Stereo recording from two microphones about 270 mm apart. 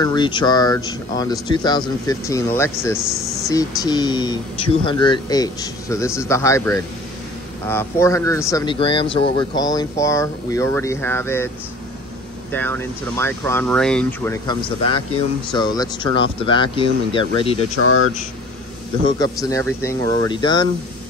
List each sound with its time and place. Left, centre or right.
0.0 s speech: centre
12.5 s speech: centre
19.0 s speech: centre